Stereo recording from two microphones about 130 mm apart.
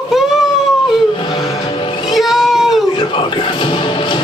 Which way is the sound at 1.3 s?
40° left (ahead or behind).